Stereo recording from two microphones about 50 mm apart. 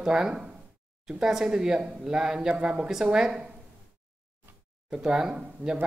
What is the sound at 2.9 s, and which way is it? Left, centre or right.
Speech, centre.